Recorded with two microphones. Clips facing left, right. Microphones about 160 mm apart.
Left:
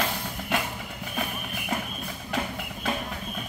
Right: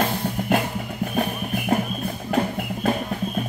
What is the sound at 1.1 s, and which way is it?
Music, 45° right (ahead or behind).